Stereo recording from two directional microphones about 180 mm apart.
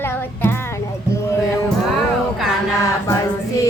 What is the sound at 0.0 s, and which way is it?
Child singing, 10° left (ahead or behind).